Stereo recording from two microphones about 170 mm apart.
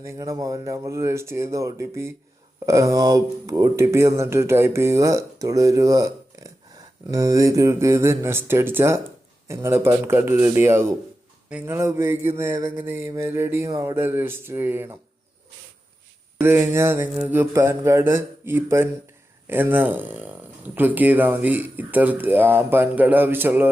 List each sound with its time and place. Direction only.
0.0 s speech: 20° right (ahead or behind)
16.4 s speech: 15° right (ahead or behind)